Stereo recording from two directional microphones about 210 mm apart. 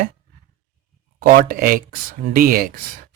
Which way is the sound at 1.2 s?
45° right (ahead or behind).